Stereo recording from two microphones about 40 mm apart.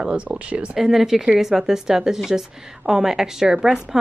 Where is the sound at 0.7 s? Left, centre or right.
Centre.